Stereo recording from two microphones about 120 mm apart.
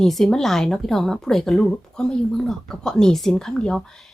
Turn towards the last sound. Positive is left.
turn(degrees=5)  # may be behind; listen again after turning